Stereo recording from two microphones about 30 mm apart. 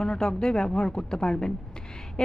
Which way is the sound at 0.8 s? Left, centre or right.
Left.